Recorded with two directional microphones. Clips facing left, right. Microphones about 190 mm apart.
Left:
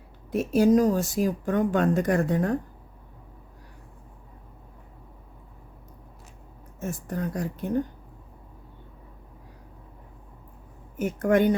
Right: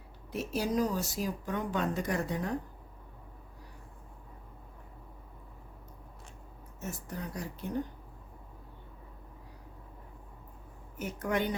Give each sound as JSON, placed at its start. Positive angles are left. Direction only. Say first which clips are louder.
{"t": 0.3, "sound": "speech", "louder": "left 12 dB", "side_deg": 50}
{"t": 6.7, "sound": "speech", "louder": "left 9 dB", "side_deg": 50}
{"t": 10.9, "sound": "speech", "louder": "left 10 dB", "side_deg": 50}